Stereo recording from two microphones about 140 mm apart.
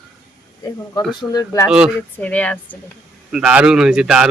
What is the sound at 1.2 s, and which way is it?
Speech, 30° left (ahead or behind).